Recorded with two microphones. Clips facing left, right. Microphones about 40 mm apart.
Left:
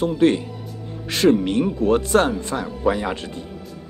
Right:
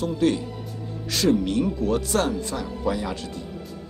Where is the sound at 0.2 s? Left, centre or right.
Left.